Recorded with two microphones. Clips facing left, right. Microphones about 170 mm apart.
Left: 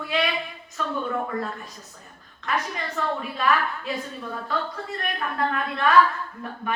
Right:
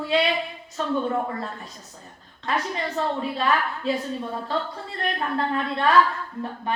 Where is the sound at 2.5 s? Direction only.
30° right (ahead or behind).